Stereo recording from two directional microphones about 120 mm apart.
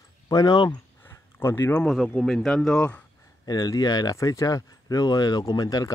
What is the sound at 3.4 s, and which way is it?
Speech, 35° left (ahead or behind).